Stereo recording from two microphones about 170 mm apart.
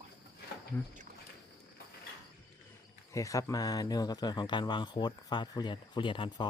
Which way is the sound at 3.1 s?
20° left (ahead or behind).